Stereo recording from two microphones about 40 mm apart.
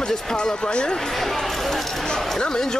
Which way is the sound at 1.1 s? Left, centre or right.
Centre.